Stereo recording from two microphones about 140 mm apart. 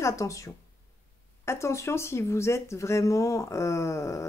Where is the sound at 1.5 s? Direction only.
20° left (ahead or behind).